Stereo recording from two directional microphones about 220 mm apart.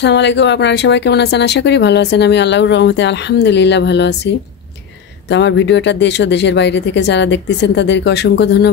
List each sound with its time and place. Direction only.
0.0 s speech: 55° left (ahead or behind)